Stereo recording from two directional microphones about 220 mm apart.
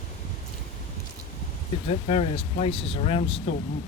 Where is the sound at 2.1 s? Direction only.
30° left (ahead or behind).